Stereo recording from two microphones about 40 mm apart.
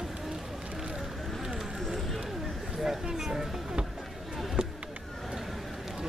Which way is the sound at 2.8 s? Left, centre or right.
Centre.